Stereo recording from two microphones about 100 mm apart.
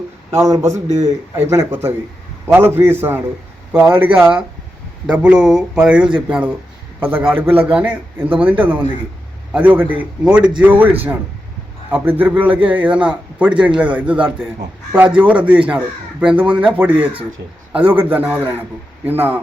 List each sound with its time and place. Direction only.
0.3 s a man's voice: 25° right (ahead or behind)
3.7 s a man's voice: 5° right (ahead or behind)